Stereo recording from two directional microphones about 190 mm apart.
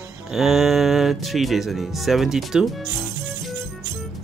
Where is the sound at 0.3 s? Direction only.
Centre (ahead or behind).